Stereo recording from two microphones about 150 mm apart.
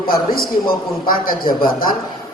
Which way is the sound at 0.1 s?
75° left (ahead or behind).